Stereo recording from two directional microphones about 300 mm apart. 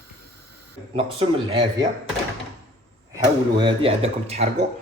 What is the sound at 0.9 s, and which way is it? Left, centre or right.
Speech, centre.